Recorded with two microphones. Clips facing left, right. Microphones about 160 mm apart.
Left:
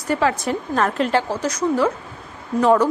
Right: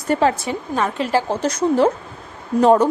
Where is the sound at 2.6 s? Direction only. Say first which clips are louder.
Right 2 dB; 25° right (ahead or behind).